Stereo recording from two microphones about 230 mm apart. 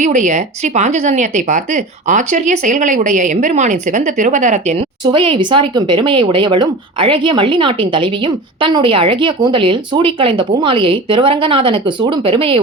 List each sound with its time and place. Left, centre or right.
0.0 s speech: right